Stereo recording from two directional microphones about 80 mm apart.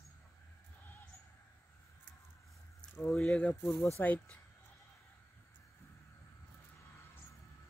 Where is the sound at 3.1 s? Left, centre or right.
Centre.